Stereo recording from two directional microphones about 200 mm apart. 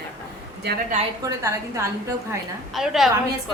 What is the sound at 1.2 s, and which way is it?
Speech, 15° right (ahead or behind).